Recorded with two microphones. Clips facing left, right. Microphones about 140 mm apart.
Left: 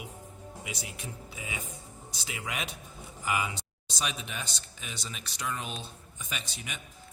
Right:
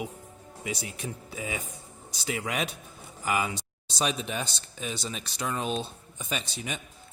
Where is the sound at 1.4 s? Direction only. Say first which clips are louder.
Right 6 dB; 40° right (ahead or behind).